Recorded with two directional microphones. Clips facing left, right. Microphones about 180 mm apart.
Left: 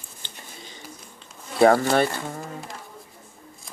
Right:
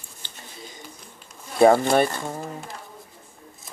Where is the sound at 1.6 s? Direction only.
20° right (ahead or behind).